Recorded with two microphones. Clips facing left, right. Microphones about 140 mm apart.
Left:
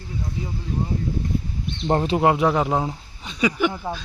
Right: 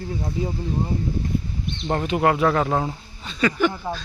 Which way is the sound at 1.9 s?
30° left (ahead or behind).